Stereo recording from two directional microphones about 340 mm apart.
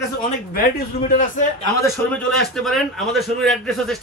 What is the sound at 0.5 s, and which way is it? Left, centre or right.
Speech, left.